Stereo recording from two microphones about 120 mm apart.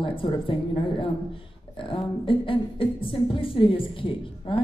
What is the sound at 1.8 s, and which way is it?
A woman's voice, 45° left (ahead or behind).